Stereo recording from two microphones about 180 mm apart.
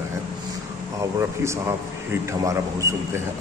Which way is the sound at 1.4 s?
15° right (ahead or behind).